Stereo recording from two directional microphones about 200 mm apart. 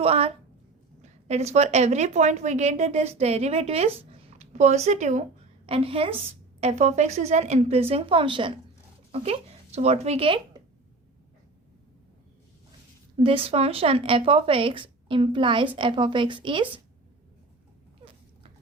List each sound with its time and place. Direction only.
0.0 s a woman's voice: 30° right (ahead or behind)
13.1 s speech: 30° right (ahead or behind)